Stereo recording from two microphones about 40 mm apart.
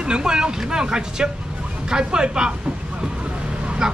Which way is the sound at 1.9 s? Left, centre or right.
Right.